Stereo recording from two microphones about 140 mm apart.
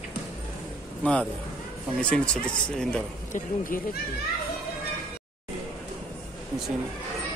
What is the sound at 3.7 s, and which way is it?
Speech, 80° left.